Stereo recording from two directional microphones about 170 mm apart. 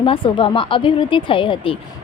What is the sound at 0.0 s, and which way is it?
Speech, 30° left (ahead or behind).